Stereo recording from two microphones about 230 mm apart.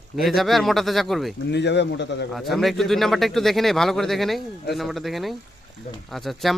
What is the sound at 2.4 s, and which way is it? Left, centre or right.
Speech, centre.